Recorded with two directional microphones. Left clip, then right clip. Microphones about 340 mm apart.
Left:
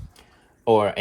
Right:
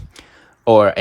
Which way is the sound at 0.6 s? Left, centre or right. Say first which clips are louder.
Right 7 dB; right.